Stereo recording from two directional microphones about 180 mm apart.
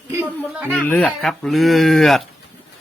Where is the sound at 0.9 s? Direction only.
5° left (ahead or behind).